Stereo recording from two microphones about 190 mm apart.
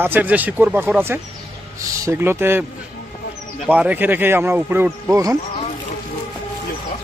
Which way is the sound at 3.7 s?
10° right (ahead or behind).